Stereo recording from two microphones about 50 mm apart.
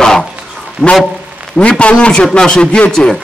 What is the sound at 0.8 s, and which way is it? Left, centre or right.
Speech, right.